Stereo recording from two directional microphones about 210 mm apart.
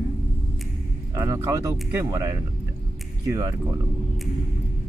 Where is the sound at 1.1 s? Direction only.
15° right (ahead or behind).